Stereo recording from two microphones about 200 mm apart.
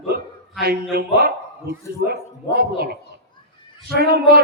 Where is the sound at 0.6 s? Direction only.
50° right (ahead or behind).